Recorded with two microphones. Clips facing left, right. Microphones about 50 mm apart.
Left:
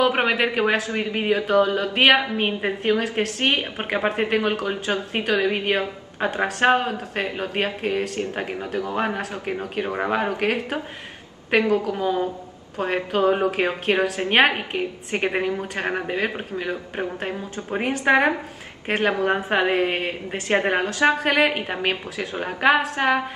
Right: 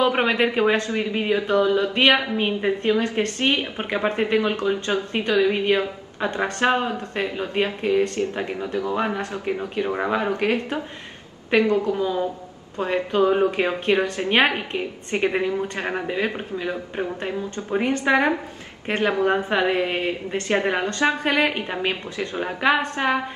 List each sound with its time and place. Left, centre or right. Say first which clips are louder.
0.0 s a woman's voice: even; centre
18.0 s a woman's voice: left 3 dB; left
18.9 s a woman's voice: even; centre
22.9 s a woman's voice: left 2 dB; centre